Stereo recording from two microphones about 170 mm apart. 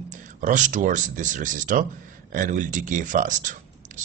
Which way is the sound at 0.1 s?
45° right (ahead or behind).